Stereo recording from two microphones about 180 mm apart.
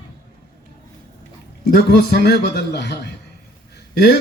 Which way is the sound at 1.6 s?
65° left (ahead or behind).